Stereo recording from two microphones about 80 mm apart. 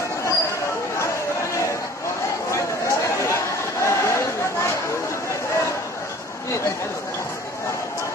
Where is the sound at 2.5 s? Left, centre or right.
Left.